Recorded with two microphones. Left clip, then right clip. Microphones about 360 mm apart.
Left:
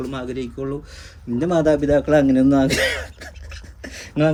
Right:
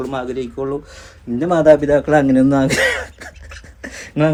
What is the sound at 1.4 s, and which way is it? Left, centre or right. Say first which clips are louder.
Speech: right 6 dB; centre.